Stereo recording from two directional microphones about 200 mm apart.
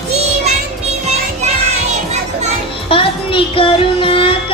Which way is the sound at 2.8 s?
25° left (ahead or behind).